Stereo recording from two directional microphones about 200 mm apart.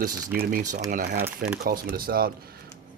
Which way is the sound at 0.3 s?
40° right (ahead or behind).